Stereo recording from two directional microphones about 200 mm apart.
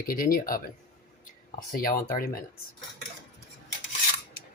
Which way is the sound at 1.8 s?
45° left (ahead or behind).